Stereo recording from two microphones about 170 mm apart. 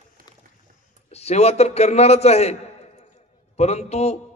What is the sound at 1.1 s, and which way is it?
A man's voice, 40° left (ahead or behind).